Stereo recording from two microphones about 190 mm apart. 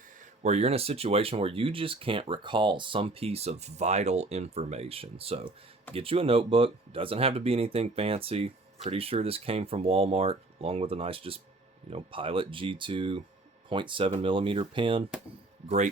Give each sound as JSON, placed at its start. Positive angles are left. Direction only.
{"t": 0.2, "sound": "speech", "side_deg": -35}